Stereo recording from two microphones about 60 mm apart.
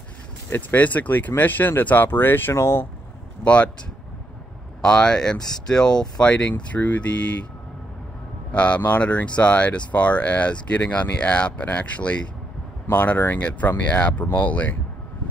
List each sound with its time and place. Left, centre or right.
0.5 s speech: left
2.5 s speech: left
3.4 s speech: centre
4.8 s speech: centre
8.5 s speech: left